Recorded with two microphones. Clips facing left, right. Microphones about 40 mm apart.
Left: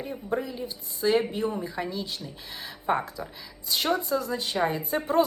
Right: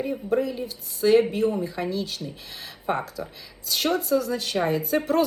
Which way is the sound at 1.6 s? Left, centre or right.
Centre.